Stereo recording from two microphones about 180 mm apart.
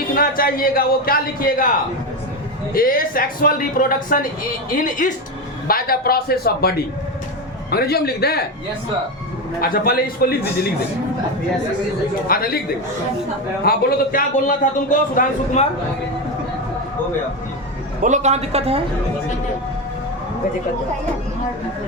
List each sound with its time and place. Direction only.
0.2 s speech: 55° left (ahead or behind)
2.7 s a man's voice: 55° left (ahead or behind)
9.6 s speech: 55° left (ahead or behind)
12.3 s speech: 55° left (ahead or behind)
13.7 s a man's voice: 50° left (ahead or behind)
18.0 s a woman's voice: 40° right (ahead or behind)